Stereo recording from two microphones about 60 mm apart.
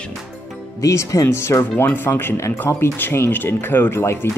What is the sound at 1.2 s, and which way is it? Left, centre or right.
Speech, left.